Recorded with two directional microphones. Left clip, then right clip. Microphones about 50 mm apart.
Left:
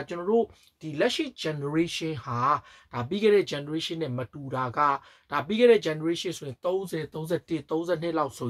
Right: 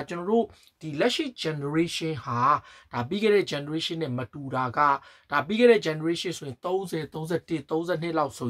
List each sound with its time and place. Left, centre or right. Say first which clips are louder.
0.0 s speech: even; right
0.8 s speech: right 1 dB; centre